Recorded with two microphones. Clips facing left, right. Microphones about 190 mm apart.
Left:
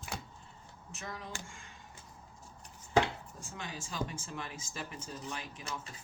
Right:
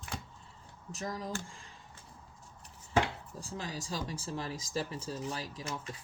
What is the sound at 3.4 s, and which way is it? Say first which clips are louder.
Speech: right 5 dB; 35° right (ahead or behind).